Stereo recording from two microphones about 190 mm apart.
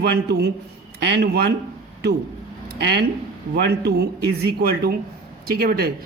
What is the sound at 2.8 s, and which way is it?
A man's voice, 60° right (ahead or behind).